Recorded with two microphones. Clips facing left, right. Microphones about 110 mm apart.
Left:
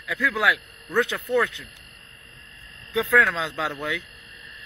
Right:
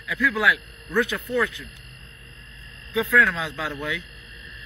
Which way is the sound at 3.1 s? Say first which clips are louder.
Left 1 dB; 80° left.